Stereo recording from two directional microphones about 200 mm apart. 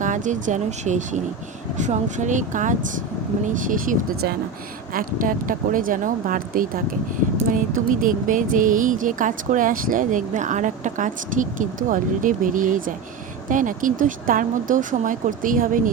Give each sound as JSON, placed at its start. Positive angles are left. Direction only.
{"t": 0.0, "sound": "speech", "side_deg": -40}
{"t": 7.9, "sound": "speech", "side_deg": -40}